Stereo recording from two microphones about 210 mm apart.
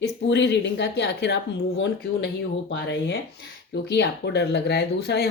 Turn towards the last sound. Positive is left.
turn(degrees=50)  # may be behind; listen again after turning